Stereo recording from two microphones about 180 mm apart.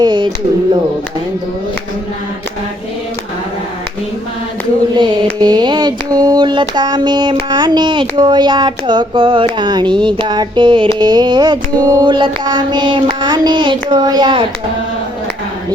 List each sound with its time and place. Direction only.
0.0 s speech: 25° right (ahead or behind)
4.9 s speech: 25° right (ahead or behind)